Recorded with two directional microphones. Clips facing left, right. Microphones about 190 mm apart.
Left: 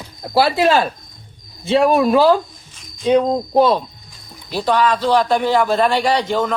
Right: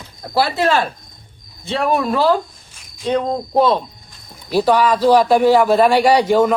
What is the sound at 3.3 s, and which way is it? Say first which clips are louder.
Speech: left 1 dB; centre (ahead or behind).